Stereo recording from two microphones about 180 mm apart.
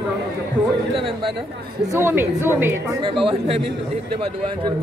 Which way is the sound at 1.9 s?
15° right (ahead or behind).